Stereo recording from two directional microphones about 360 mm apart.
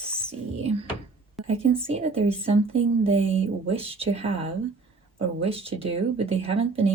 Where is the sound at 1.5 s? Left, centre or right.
Centre.